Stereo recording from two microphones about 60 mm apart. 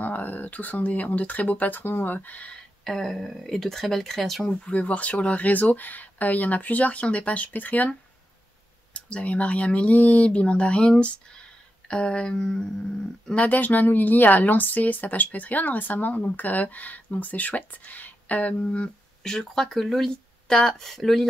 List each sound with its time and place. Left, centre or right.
0.0 s speech: left
2.8 s speech: centre
4.6 s speech: left
8.9 s speech: left
13.3 s speech: left
19.2 s speech: centre